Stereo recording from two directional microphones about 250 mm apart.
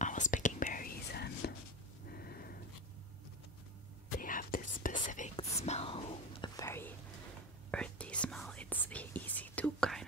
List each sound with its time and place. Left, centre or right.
0.0 s whispering: left
2.0 s a sound: left
4.2 s whispering: left; by 10.0 s centre